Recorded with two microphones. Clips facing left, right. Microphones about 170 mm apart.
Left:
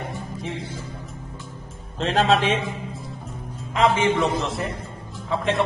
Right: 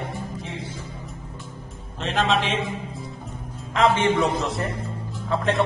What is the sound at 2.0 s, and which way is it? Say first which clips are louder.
Speech: left 3 dB; 35° left (ahead or behind).